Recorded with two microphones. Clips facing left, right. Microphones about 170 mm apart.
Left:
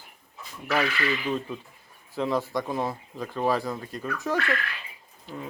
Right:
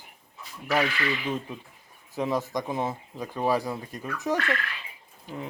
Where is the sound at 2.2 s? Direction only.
15° right (ahead or behind).